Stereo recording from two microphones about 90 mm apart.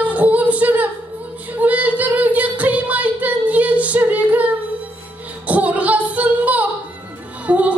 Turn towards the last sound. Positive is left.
turn(degrees=-15)  # may be behind; listen again after turning